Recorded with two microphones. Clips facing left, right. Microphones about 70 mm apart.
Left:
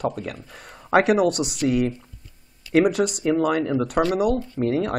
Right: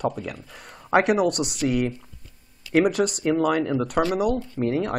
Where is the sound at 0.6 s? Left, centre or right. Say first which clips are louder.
Left 2 dB; centre.